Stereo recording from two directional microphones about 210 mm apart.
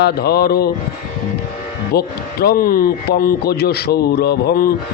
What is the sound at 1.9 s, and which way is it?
Speech, 50° left (ahead or behind).